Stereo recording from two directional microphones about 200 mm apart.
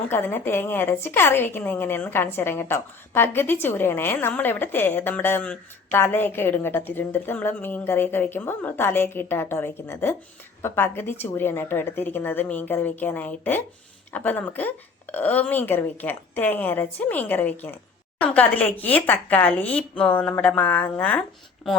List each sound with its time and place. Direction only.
0.1 s a woman's voice: 10° left (ahead or behind)